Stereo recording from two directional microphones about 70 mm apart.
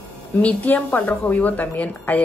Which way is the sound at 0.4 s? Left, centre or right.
Left.